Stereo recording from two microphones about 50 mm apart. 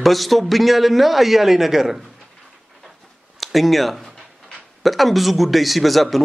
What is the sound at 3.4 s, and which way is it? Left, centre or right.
A man's voice, centre.